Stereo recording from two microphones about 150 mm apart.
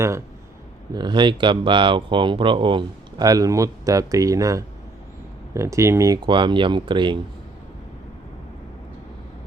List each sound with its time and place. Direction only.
0.9 s speech: 30° right (ahead or behind)
6.2 s speech: 30° right (ahead or behind)